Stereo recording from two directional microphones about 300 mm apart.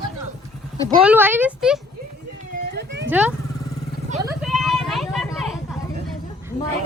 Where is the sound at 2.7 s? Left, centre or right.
Right.